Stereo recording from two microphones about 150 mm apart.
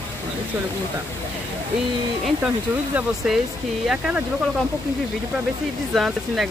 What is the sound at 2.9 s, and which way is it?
Speech, 5° right (ahead or behind).